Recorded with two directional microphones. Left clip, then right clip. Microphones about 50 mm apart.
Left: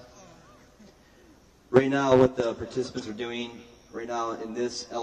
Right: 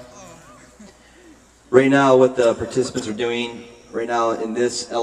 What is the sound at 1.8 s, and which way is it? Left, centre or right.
Speech, left.